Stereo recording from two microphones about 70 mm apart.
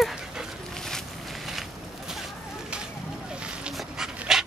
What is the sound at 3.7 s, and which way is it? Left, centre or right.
Dog, centre.